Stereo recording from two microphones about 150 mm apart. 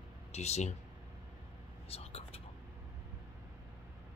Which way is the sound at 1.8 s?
40° left (ahead or behind).